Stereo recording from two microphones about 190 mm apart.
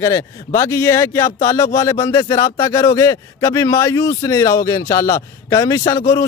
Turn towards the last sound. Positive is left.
turn(degrees=15)  # may be behind; listen again after turning